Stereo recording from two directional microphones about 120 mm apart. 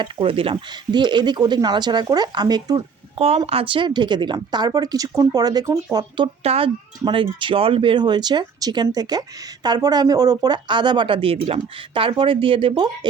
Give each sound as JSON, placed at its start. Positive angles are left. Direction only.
{"t": 0.0, "sound": "speech", "side_deg": -50}
{"t": 3.2, "sound": "speech", "side_deg": -55}
{"t": 6.2, "sound": "speech", "side_deg": -55}